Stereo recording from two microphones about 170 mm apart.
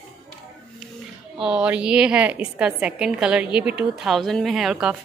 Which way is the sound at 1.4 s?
5° right (ahead or behind).